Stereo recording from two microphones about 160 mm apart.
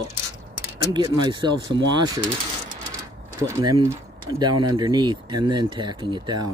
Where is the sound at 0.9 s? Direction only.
25° right (ahead or behind).